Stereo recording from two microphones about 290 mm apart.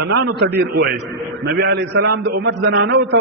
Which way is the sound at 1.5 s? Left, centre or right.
Right.